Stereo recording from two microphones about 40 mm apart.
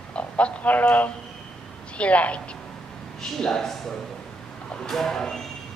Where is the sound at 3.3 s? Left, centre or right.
Centre.